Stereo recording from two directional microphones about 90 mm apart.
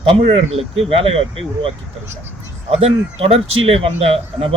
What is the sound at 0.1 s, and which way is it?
Speech, 90° right.